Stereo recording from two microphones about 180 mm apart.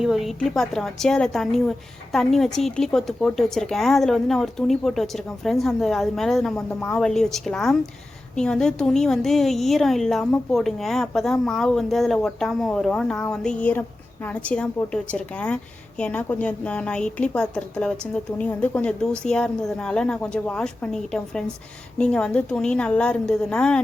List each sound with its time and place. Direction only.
0.0 s a woman's voice: centre (ahead or behind)